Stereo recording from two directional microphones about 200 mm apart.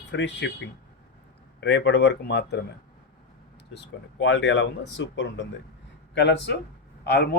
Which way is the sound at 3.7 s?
60° left (ahead or behind).